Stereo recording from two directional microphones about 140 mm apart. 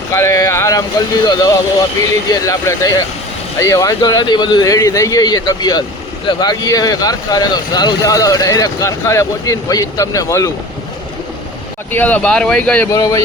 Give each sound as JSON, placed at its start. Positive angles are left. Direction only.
{"t": 0.1, "sound": "speech", "side_deg": 20}
{"t": 11.9, "sound": "speech", "side_deg": 10}
{"t": 12.9, "sound": "speech", "side_deg": 25}